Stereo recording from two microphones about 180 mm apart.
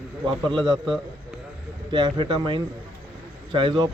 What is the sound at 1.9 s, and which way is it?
A man's voice, 25° right (ahead or behind).